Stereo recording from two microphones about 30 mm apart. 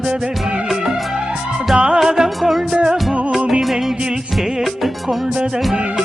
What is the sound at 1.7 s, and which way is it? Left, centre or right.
Music, right.